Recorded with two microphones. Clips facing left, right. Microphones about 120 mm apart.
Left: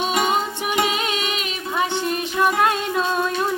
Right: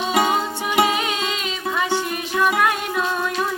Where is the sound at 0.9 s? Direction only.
20° left (ahead or behind).